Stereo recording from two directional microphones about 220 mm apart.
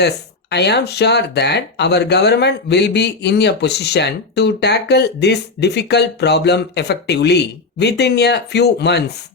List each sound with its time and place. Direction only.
0.5 s speech: 50° left (ahead or behind)